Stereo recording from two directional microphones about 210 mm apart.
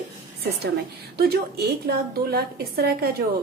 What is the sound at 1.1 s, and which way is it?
A woman's voice, 50° right (ahead or behind).